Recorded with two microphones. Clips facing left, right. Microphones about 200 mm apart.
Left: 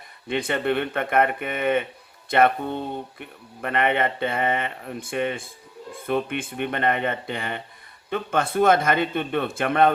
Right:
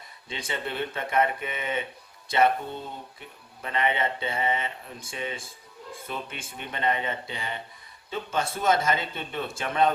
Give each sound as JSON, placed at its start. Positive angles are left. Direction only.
{"t": 0.3, "sound": "speech", "side_deg": 60}